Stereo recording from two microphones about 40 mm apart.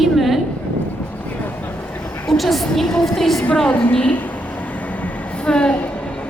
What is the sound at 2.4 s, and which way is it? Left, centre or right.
A woman's voice, centre.